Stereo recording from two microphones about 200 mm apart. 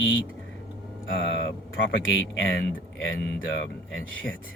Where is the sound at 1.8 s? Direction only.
75° left (ahead or behind).